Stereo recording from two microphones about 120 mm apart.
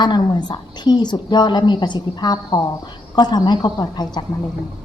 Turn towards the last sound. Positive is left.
turn(degrees=35)  # may be behind; listen again after turning